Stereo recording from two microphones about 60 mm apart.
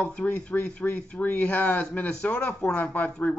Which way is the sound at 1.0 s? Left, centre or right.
Centre.